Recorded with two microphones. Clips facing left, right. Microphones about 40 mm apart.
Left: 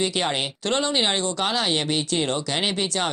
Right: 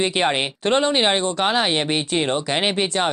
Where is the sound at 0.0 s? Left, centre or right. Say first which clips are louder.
Right 4 dB; right.